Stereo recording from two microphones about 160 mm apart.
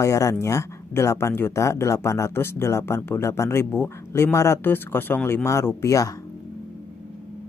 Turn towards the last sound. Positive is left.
turn(degrees=20)  # may be behind; listen again after turning